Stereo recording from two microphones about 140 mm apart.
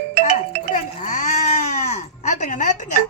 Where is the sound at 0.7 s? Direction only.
65° left (ahead or behind).